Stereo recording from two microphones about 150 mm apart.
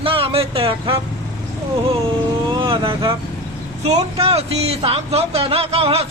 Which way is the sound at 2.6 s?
35° right (ahead or behind).